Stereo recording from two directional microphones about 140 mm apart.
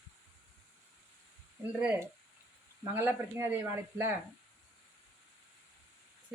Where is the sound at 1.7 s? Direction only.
15° right (ahead or behind).